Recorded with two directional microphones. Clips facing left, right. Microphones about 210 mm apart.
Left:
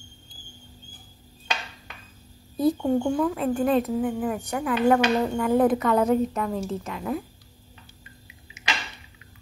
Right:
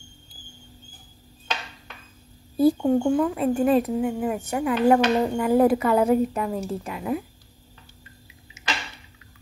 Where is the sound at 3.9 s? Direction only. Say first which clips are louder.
Right 1 dB; 10° right (ahead or behind).